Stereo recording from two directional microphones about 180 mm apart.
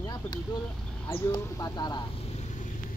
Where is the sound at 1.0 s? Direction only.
20° left (ahead or behind).